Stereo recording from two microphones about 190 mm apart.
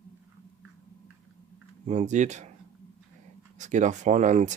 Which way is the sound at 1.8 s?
40° right (ahead or behind).